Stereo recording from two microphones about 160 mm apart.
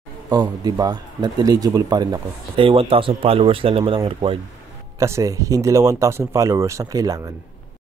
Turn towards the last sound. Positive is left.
turn(degrees=-20)  # may be behind; listen again after turning